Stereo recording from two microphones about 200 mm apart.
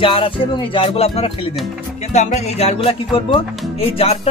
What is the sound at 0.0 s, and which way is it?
Speech, 25° left (ahead or behind).